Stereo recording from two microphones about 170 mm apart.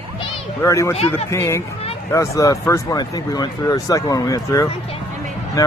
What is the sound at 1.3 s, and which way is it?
Speech, 15° left (ahead or behind).